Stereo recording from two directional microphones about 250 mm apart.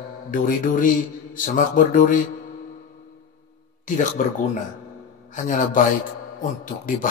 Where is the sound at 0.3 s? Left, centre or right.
Left.